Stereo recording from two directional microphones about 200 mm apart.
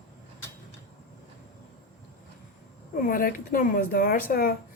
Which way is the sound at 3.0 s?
45° left (ahead or behind).